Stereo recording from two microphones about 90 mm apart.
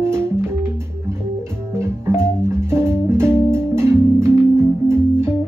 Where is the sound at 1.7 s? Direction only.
30° right (ahead or behind).